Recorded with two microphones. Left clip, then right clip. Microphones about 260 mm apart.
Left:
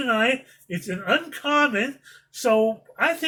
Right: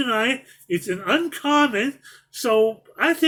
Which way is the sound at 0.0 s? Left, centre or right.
Centre.